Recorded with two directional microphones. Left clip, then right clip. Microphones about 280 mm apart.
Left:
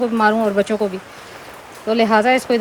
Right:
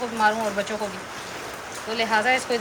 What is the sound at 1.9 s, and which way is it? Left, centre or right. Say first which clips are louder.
Speech: left 7 dB; centre.